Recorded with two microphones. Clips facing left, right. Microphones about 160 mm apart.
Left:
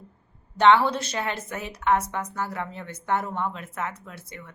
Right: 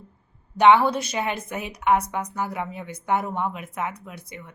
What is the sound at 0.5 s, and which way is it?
A woman's voice, 15° right (ahead or behind).